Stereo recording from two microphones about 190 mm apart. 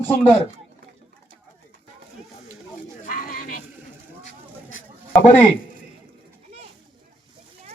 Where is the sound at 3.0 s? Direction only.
45° left (ahead or behind).